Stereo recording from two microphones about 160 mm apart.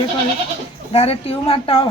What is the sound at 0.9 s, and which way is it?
Speech, 40° left (ahead or behind).